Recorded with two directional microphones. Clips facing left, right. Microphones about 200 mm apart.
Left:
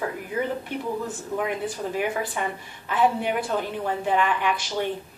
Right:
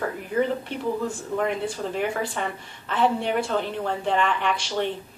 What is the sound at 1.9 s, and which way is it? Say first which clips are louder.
A woman's voice: left 1 dB; 10° left (ahead or behind).